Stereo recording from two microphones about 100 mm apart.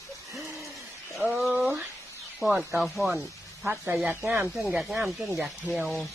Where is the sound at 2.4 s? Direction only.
5° right (ahead or behind).